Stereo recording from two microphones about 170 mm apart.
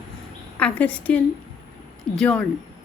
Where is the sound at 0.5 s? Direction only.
10° left (ahead or behind).